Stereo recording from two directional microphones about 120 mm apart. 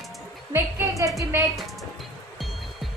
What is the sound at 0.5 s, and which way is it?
Speech, 25° right (ahead or behind).